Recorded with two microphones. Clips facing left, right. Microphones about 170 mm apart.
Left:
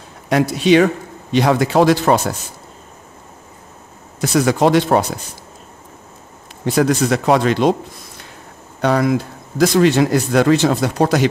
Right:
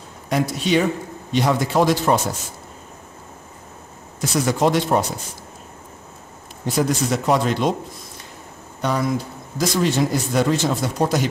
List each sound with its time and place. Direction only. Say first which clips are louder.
0.3 s speech: left 6 dB; 80° left
4.2 s speech: left 5 dB; 65° left (ahead or behind)
6.6 s speech: left 5 dB; 75° left (ahead or behind)
8.8 s speech: left 6 dB; 80° left